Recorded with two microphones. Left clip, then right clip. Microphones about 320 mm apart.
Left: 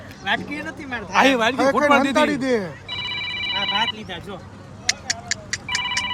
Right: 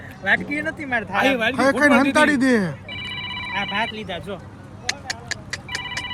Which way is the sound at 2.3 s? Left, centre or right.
Right.